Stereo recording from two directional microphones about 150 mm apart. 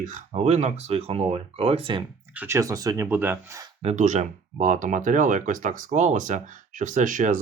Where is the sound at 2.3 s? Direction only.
15° right (ahead or behind).